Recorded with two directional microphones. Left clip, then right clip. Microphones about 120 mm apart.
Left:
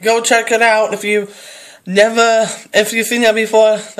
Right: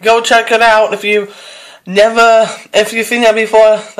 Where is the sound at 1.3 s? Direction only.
60° left (ahead or behind).